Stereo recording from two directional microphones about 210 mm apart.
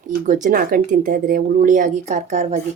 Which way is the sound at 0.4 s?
40° right (ahead or behind).